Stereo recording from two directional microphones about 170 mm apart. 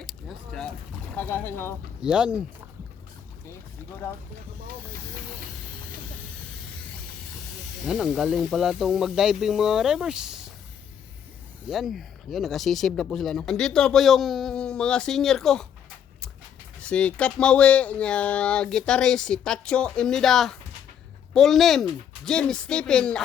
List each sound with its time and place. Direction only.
0.0 s boat: centre (ahead or behind)
1.1 s speech: 10° left (ahead or behind)
2.0 s speech: 5° right (ahead or behind)
7.9 s speech: 5° right (ahead or behind)
11.7 s speech: centre (ahead or behind)
16.8 s speech: 5° left (ahead or behind)